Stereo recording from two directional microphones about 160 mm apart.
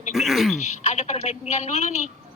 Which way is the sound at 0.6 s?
45° left (ahead or behind).